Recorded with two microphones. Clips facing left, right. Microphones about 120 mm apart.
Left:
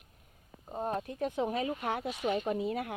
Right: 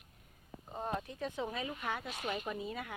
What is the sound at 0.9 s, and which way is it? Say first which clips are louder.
Speech: left 5 dB; 50° left (ahead or behind).